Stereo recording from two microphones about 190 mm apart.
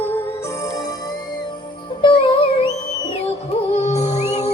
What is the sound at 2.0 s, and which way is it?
Music, 25° left (ahead or behind).